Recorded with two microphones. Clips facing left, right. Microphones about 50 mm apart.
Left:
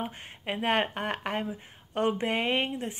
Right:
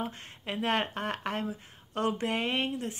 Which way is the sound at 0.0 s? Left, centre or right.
Left.